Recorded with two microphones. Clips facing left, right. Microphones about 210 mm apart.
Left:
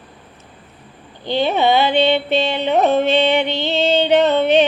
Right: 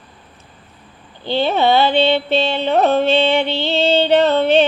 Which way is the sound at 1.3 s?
15° left (ahead or behind).